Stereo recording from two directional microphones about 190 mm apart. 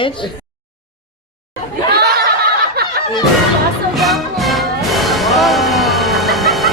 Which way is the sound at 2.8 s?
55° right (ahead or behind).